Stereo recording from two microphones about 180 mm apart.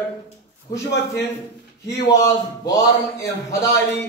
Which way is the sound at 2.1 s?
20° left (ahead or behind).